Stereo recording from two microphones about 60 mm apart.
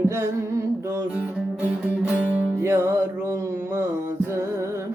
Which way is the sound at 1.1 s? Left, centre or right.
Right.